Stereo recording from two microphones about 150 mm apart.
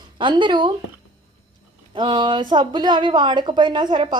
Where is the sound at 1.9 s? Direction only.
30° right (ahead or behind).